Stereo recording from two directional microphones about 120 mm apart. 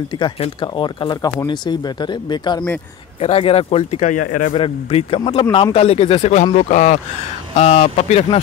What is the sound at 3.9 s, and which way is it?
Speech, 90° left.